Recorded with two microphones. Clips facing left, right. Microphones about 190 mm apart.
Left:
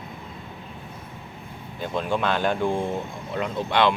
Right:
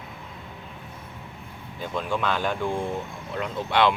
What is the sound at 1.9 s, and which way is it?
Speech, 30° left (ahead or behind).